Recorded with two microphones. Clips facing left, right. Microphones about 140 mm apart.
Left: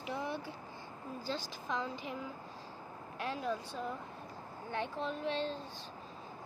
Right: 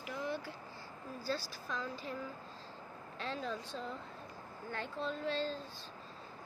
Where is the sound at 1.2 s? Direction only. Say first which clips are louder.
Right 1 dB; 20° left (ahead or behind).